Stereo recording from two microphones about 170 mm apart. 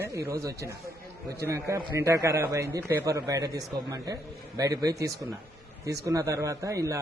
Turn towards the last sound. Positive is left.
turn(degrees=-20)  # may be behind; listen again after turning